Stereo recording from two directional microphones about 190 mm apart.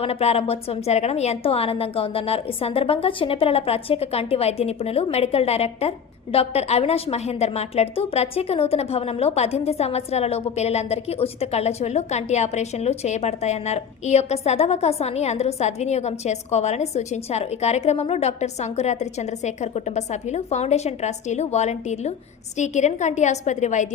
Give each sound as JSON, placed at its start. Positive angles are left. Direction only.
{"t": 0.0, "sound": "a woman's voice", "side_deg": 35}